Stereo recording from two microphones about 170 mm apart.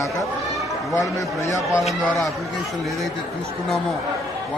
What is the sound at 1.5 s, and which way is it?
Speech, 15° left (ahead or behind).